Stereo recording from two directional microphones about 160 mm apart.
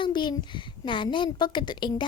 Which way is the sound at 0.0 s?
30° left (ahead or behind).